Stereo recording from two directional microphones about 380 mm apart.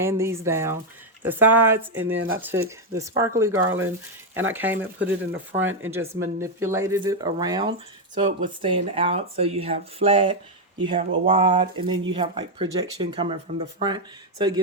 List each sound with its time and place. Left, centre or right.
0.0 s speech: centre
2.1 s speech: right
2.5 s speech: centre